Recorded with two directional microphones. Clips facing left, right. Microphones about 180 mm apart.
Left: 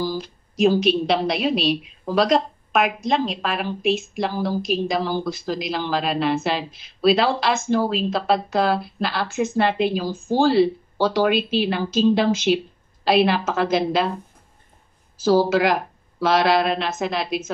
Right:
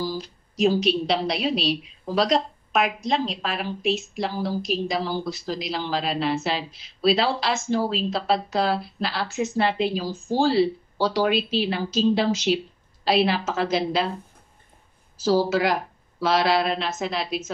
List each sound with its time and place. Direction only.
0.0 s a woman's voice: 50° left (ahead or behind)
15.1 s a woman's voice: 50° left (ahead or behind)
15.5 s speech: 90° left
16.2 s speech: 55° left (ahead or behind)